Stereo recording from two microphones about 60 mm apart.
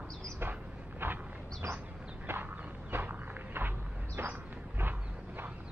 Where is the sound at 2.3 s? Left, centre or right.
Right.